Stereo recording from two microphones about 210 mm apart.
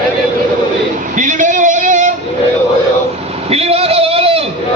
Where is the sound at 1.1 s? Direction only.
40° right (ahead or behind).